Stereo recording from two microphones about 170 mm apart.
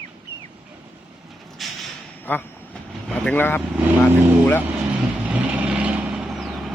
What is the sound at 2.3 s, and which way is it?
Speech, 10° left (ahead or behind).